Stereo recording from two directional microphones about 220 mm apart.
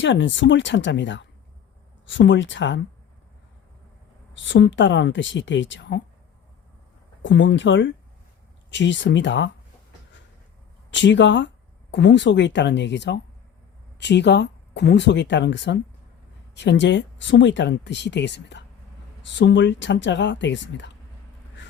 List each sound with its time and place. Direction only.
0.0 s speech: 55° left (ahead or behind)
4.4 s speech: 55° left (ahead or behind)
7.2 s speech: 55° left (ahead or behind)
10.9 s speech: 55° left (ahead or behind)